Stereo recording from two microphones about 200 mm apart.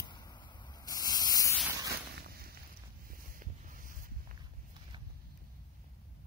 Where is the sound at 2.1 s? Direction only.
50° right (ahead or behind).